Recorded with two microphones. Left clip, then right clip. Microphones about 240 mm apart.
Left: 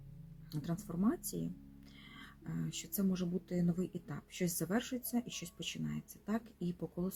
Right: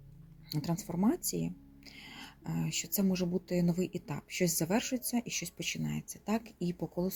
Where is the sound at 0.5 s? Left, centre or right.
Right.